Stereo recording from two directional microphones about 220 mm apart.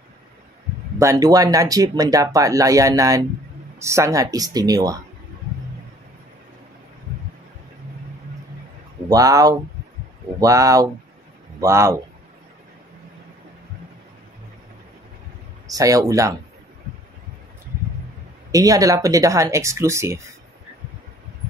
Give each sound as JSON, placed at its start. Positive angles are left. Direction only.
{"t": 0.9, "sound": "speech", "side_deg": -15}
{"t": 9.1, "sound": "speech", "side_deg": -15}
{"t": 15.6, "sound": "speech", "side_deg": -15}
{"t": 18.5, "sound": "speech", "side_deg": -15}